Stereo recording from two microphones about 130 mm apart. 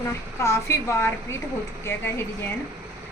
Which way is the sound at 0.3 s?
20° left (ahead or behind).